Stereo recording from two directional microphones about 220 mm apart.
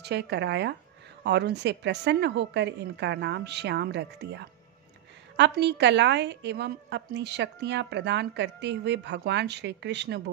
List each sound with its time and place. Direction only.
0.0 s a woman's voice: 50° right (ahead or behind)